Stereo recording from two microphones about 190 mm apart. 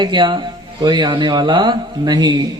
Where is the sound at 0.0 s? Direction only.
25° right (ahead or behind).